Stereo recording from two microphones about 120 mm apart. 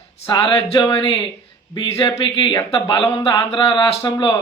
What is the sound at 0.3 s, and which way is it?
A man's voice, 40° left (ahead or behind).